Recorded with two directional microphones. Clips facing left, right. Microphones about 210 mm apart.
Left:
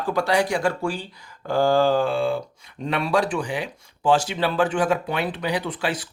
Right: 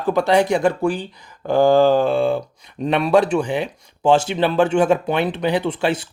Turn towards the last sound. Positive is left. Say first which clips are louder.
# right 6 dB
turn(degrees=-25)  # may be behind; listen again after turning